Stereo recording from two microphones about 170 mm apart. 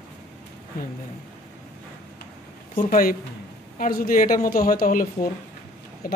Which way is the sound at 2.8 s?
55° left (ahead or behind).